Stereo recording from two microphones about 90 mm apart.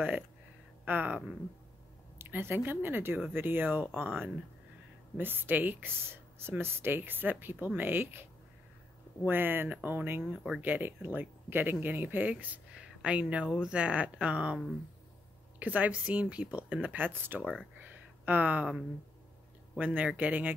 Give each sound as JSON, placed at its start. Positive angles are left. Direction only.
{"t": 0.8, "sound": "speech", "side_deg": -20}
{"t": 2.1, "sound": "a woman's voice", "side_deg": -25}
{"t": 10.2, "sound": "speech", "side_deg": -5}
{"t": 10.6, "sound": "speech", "side_deg": -20}
{"t": 15.6, "sound": "speech", "side_deg": -15}
{"t": 17.4, "sound": "speech", "side_deg": 10}
{"t": 17.7, "sound": "a sound", "side_deg": -20}
{"t": 19.8, "sound": "speech", "side_deg": -20}